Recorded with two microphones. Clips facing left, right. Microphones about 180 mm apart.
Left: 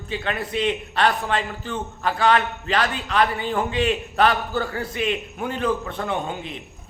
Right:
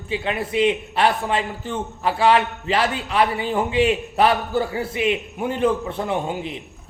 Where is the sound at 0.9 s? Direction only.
25° right (ahead or behind).